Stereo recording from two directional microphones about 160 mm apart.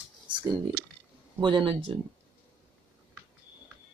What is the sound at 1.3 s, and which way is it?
Speech, 30° right (ahead or behind).